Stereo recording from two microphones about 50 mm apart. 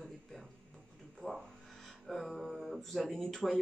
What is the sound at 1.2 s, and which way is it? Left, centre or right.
Speech, left.